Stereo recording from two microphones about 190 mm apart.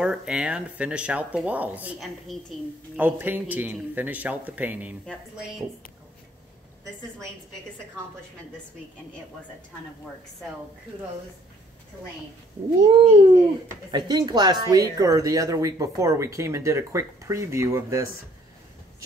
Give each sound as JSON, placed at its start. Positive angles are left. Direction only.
{"t": 0.0, "sound": "speech", "side_deg": -5}
{"t": 12.8, "sound": "cat", "side_deg": -30}
{"t": 13.9, "sound": "speech", "side_deg": -20}